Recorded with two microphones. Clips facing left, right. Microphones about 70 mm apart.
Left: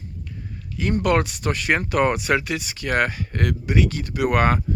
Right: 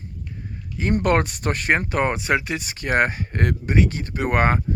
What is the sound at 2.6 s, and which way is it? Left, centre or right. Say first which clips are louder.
Speech: right 1 dB; right.